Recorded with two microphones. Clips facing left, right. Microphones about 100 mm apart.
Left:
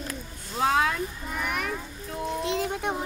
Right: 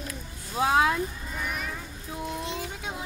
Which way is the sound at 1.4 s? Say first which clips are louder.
Left 4 dB; 60° left (ahead or behind).